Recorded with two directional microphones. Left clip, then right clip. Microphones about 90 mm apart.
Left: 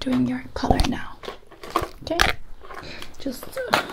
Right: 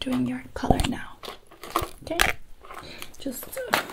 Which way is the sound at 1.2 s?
35° left (ahead or behind).